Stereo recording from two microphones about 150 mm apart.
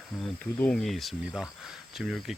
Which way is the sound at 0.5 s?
10° left (ahead or behind).